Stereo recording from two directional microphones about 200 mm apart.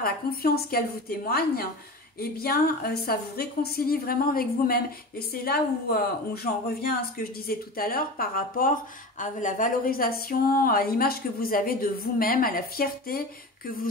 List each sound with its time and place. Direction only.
0.0 s a woman's voice: 50° left (ahead or behind)